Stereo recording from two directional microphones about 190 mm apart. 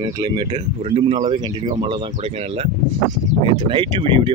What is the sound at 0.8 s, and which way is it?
Speech, 35° right (ahead or behind).